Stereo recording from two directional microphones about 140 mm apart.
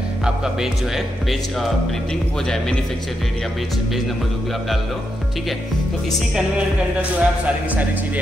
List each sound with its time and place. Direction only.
0.2 s speech: 5° right (ahead or behind)
7.0 s a man's voice: 10° right (ahead or behind)